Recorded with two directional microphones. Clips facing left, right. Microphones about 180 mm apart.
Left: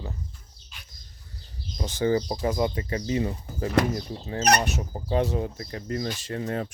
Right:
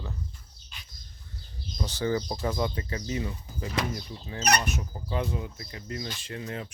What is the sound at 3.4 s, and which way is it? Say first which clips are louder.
Speech: left 8 dB; 55° left (ahead or behind).